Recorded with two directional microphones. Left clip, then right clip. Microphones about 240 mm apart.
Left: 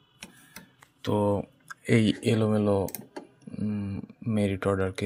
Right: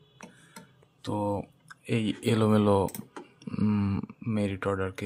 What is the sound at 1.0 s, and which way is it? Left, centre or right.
Speech, centre.